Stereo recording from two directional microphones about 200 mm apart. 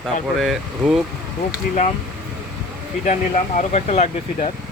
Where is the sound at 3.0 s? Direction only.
35° left (ahead or behind).